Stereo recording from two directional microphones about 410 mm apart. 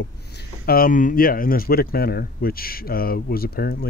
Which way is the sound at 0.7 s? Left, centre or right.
Left.